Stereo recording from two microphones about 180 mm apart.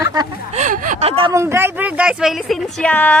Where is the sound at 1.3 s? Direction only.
15° right (ahead or behind); by 3.2 s 10° left (ahead or behind).